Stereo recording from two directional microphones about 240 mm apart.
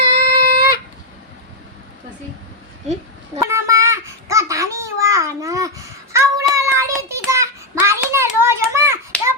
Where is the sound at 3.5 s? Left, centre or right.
Centre.